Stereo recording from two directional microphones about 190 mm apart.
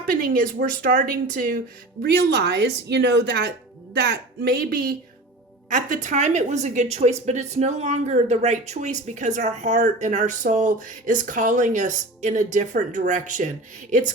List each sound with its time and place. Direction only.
0.0 s speech: 50° right (ahead or behind)
2.0 s a woman's voice: 60° right (ahead or behind); by 13.5 s 40° right (ahead or behind)